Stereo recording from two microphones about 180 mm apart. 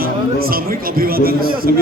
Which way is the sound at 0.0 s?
55° right (ahead or behind).